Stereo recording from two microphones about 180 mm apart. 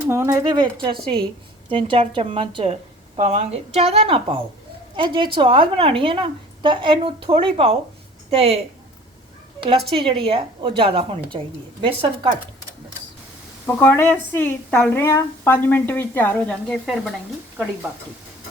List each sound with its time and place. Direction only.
0.1 s a woman's voice: 15° right (ahead or behind); by 8.5 s 30° right (ahead or behind)
9.9 s a woman's voice: 30° right (ahead or behind)
13.7 s a woman's voice: 15° left (ahead or behind)
16.8 s speech: centre (ahead or behind)